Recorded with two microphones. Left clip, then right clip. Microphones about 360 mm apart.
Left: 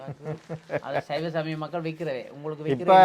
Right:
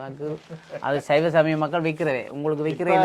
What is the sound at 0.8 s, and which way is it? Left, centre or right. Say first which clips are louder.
Speech: right 11 dB; right.